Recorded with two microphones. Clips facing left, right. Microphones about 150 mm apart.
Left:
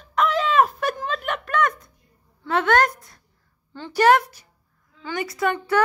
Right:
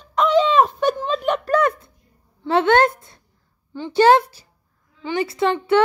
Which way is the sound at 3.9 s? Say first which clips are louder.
Right 3 dB; 30° right (ahead or behind).